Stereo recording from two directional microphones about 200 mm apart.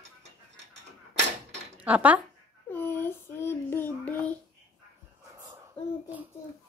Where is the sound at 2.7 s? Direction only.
10° left (ahead or behind).